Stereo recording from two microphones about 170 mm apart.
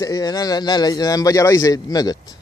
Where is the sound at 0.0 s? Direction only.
20° left (ahead or behind).